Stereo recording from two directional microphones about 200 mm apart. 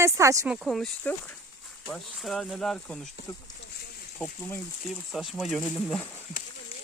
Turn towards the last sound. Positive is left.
turn(degrees=0)  # may be behind; listen again after turning